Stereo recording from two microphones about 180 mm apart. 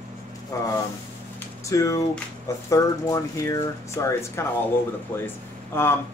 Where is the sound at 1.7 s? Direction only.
20° left (ahead or behind).